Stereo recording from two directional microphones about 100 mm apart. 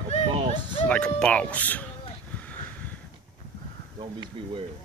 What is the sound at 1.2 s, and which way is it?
Speech, 10° left (ahead or behind).